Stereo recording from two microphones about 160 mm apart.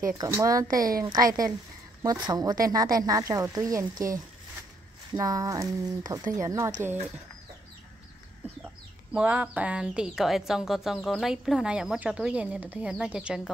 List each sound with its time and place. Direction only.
0.0 s a woman's voice: 20° right (ahead or behind)
9.1 s a woman's voice: 10° right (ahead or behind)